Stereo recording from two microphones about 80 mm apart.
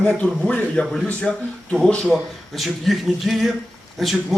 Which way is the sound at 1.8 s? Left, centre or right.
Centre.